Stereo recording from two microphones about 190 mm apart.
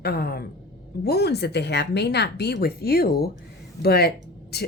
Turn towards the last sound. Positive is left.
turn(degrees=55)  # may be behind; listen again after turning